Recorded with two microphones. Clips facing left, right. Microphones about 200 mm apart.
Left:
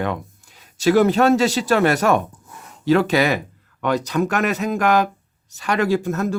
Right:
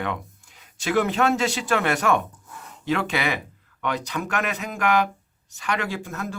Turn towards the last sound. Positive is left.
turn(degrees=40)  # may be behind; listen again after turning